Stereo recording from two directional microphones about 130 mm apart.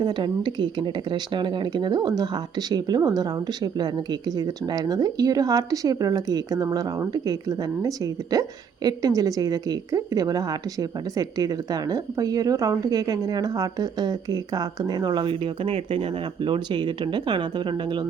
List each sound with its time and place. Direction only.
0.0 s speech: 35° right (ahead or behind)